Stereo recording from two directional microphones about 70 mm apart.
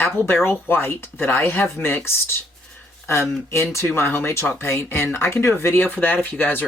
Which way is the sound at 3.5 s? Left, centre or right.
Left.